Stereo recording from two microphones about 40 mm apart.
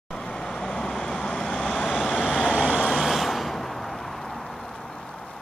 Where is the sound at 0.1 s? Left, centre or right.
Centre.